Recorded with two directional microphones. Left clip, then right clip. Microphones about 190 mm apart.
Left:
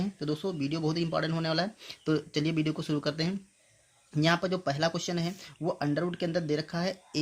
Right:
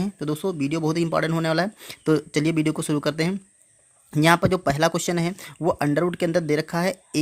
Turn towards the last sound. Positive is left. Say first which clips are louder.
# right 9 dB
turn(degrees=-40)  # may be behind; listen again after turning